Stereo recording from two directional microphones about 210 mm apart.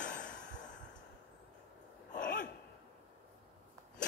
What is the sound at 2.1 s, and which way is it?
Gasp, 40° left (ahead or behind).